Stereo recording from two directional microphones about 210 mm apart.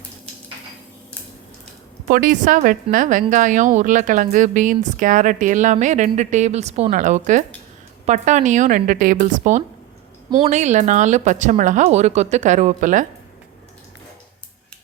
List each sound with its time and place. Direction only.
2.0 s a woman's voice: 40° right (ahead or behind)
10.2 s a woman's voice: 20° right (ahead or behind)
10.5 s a woman's voice: 35° right (ahead or behind)